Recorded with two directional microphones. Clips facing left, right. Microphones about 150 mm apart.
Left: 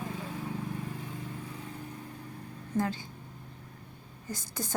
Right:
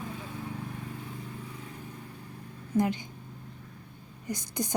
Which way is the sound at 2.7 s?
15° right (ahead or behind).